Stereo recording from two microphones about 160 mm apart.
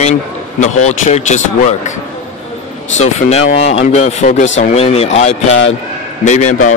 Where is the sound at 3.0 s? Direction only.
45° left (ahead or behind).